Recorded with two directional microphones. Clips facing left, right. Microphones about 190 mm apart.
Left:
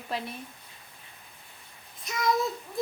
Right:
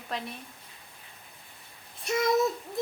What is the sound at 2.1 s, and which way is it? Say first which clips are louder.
Speech: right 2 dB; 25° right (ahead or behind).